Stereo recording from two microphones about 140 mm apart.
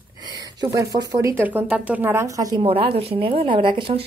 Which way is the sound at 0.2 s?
25° right (ahead or behind).